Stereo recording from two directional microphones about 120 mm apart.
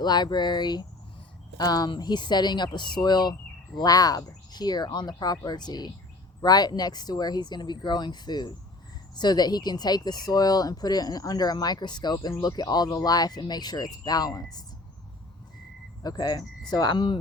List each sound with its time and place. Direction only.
0.0 s speech: 35° left (ahead or behind)
16.0 s speech: 35° left (ahead or behind)